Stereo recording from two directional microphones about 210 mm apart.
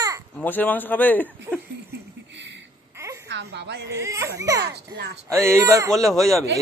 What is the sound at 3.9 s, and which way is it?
Speech, 15° right (ahead or behind).